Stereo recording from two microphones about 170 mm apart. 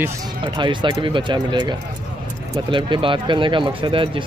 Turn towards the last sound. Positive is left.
turn(degrees=-30)  # may be behind; listen again after turning